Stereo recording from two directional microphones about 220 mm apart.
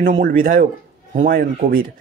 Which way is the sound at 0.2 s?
40° right (ahead or behind).